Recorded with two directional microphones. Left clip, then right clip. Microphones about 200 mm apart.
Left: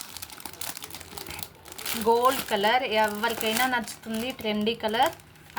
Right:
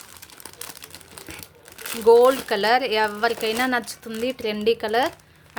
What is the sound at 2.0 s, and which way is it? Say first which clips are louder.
Speech: right 8 dB; 55° right (ahead or behind).